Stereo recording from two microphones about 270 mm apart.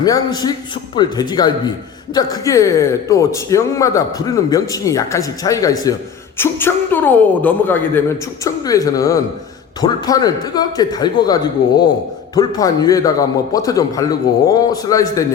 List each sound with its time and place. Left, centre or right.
0.0 s speech: centre